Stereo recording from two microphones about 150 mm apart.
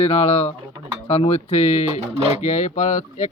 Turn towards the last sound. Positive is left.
turn(degrees=50)  # may be behind; listen again after turning